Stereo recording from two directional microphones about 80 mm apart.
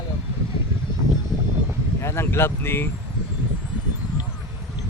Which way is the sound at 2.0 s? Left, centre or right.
Left.